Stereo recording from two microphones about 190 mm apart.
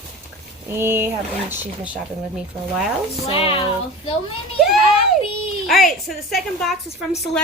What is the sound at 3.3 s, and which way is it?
Speech, 30° left (ahead or behind).